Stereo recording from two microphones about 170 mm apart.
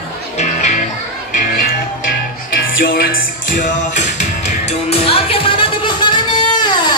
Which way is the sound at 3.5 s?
45° left (ahead or behind).